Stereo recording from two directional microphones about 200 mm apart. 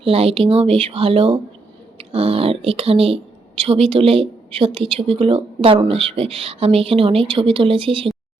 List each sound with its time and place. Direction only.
0.0 s speech: 30° right (ahead or behind)